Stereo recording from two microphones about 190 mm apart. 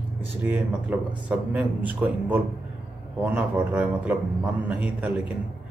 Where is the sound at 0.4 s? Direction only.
5° right (ahead or behind).